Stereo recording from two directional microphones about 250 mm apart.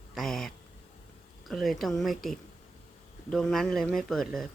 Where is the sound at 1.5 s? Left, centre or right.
Centre.